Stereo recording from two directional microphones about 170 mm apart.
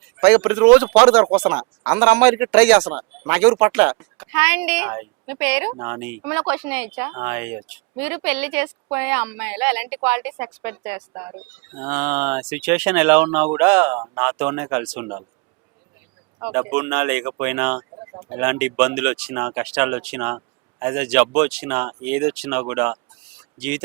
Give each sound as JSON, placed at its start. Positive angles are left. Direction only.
{"t": 0.2, "sound": "speech", "side_deg": -5}
{"t": 16.4, "sound": "speech", "side_deg": -10}